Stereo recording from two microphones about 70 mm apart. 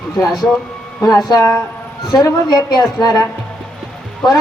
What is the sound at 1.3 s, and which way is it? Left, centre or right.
Speech, left.